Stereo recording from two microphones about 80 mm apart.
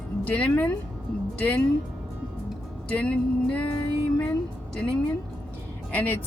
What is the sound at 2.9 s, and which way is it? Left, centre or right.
Music, centre.